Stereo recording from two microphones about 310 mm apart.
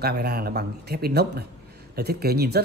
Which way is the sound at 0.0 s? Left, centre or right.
Right.